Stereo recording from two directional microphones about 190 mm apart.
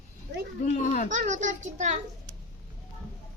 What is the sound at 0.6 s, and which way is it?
Speech, 45° left (ahead or behind).